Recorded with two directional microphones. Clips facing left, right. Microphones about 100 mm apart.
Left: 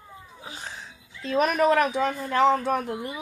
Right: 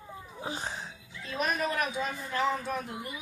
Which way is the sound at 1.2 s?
70° left (ahead or behind).